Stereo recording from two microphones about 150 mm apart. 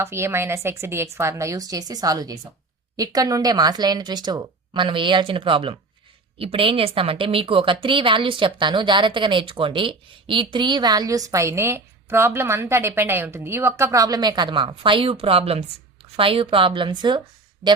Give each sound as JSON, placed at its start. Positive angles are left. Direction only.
{"t": 0.0, "sound": "a woman's voice", "side_deg": -15}